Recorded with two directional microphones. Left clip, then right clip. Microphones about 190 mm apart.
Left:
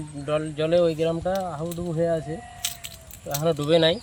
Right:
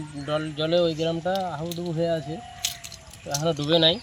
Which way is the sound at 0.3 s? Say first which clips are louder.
Left 2 dB; centre (ahead or behind).